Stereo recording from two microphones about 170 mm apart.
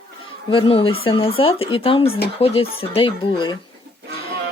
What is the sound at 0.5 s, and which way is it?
Speech, 30° left (ahead or behind).